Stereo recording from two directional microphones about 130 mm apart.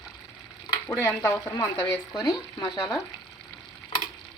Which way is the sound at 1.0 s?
20° left (ahead or behind).